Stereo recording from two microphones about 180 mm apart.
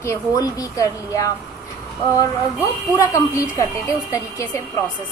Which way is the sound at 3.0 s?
15° left (ahead or behind).